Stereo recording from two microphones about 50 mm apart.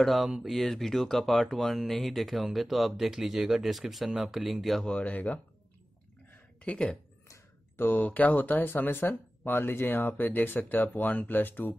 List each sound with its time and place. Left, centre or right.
0.0 s speech: centre
4.8 s speech: left
6.6 s speech: left
7.7 s speech: left